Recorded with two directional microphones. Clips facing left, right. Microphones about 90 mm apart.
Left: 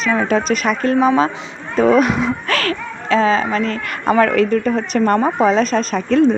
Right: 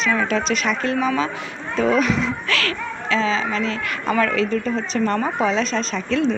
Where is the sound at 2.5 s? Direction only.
40° left (ahead or behind).